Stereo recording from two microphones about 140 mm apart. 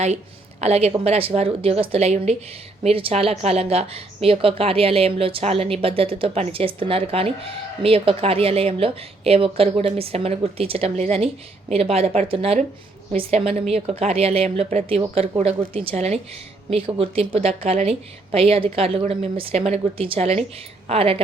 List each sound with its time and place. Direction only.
0.6 s a woman's voice: 50° right (ahead or behind)